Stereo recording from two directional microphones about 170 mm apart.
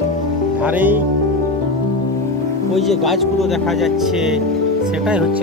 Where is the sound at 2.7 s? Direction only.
Centre (ahead or behind).